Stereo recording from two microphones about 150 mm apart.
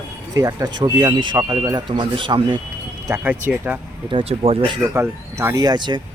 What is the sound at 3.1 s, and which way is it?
Speech, 20° right (ahead or behind).